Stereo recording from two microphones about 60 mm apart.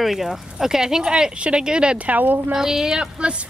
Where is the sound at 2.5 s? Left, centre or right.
Centre.